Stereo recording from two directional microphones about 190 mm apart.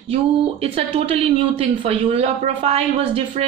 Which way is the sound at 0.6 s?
30° right (ahead or behind).